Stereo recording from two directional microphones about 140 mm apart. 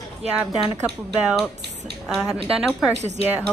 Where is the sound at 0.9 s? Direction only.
Centre (ahead or behind).